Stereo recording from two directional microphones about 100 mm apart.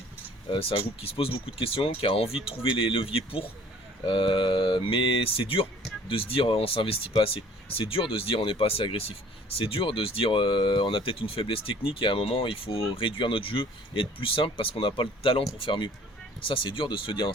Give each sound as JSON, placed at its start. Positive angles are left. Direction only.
{"t": 0.5, "sound": "speech", "side_deg": 55}